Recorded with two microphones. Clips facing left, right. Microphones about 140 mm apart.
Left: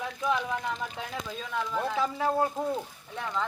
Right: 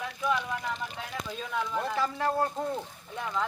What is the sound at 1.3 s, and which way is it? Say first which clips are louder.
Speech: right 2 dB; centre (ahead or behind).